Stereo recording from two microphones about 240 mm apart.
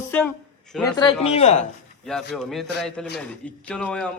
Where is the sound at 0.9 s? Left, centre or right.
Left.